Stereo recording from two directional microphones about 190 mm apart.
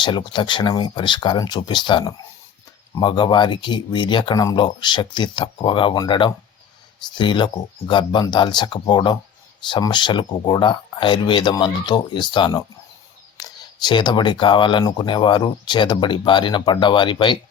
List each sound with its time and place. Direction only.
0.0 s speech: 25° left (ahead or behind)